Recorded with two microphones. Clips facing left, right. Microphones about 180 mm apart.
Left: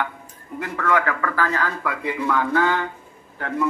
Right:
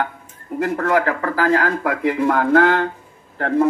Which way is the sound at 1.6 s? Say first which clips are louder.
Right 7 dB; 45° right (ahead or behind).